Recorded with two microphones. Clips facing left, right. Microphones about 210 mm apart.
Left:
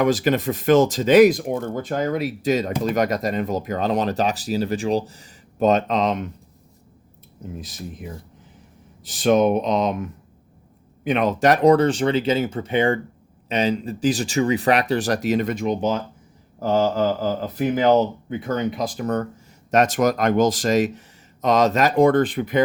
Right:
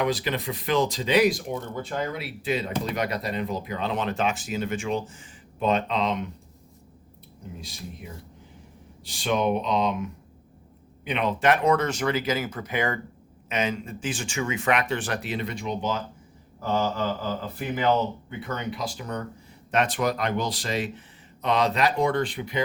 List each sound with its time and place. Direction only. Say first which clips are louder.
0.0 s speech: left 7 dB; 45° left (ahead or behind)
9.0 s speech: left 7 dB; 45° left (ahead or behind)